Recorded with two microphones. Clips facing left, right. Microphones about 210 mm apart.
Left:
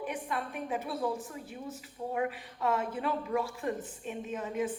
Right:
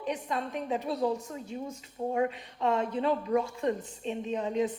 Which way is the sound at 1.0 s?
25° right (ahead or behind).